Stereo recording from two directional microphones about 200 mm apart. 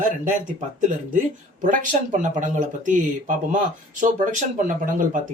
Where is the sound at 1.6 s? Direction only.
40° right (ahead or behind).